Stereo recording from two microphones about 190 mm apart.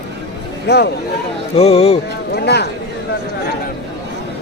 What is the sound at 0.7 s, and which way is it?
Speech, 60° left (ahead or behind).